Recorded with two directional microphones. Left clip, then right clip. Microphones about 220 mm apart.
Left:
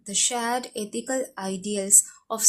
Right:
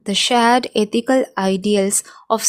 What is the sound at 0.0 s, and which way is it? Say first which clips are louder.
Speech: right 12 dB; 40° right (ahead or behind).